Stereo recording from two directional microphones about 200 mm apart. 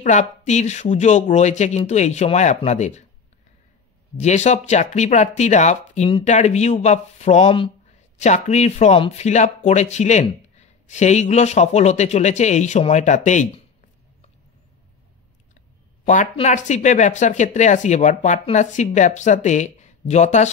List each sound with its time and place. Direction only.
0.0 s speech: 40° left (ahead or behind)
4.2 s speech: 35° left (ahead or behind)
16.3 s speech: 35° left (ahead or behind)